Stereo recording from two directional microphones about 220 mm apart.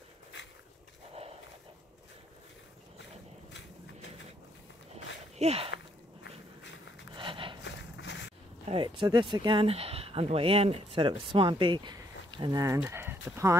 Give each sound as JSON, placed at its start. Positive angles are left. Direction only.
{"t": 5.4, "sound": "speech", "side_deg": -25}
{"t": 6.2, "sound": "walk", "side_deg": 60}
{"t": 7.2, "sound": "a sound", "side_deg": -25}
{"t": 7.6, "sound": "horse", "side_deg": 55}
{"t": 8.6, "sound": "speech", "side_deg": -25}